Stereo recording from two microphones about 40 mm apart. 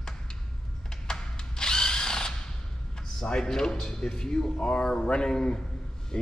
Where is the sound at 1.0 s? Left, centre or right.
Centre.